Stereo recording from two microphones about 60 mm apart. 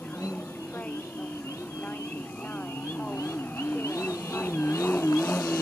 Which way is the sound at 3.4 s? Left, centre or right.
Left.